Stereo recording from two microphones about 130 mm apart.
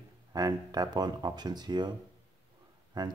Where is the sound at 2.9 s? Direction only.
35° right (ahead or behind).